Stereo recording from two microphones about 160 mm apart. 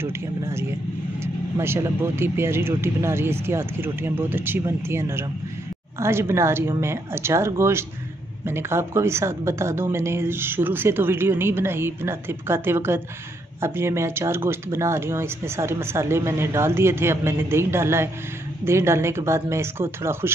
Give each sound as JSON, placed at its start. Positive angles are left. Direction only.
{"t": 0.0, "sound": "speech", "side_deg": -15}